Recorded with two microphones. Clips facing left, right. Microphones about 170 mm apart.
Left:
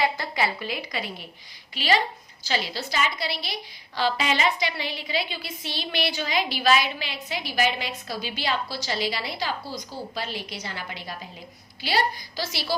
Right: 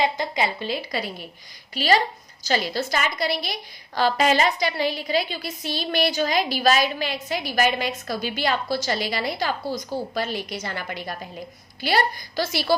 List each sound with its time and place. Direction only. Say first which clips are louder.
0.0 s a woman's voice: right 2 dB; 20° right (ahead or behind); by 12.7 s 55° right (ahead or behind)